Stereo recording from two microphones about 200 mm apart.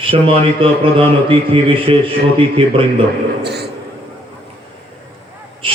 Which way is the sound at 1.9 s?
25° right (ahead or behind).